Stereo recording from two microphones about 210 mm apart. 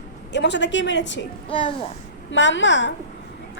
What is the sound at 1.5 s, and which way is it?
Speech, 25° left (ahead or behind).